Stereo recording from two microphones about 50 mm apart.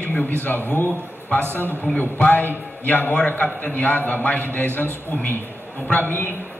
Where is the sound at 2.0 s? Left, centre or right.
Left.